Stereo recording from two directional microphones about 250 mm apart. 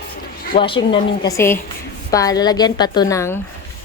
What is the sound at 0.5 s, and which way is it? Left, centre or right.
A woman's voice, left.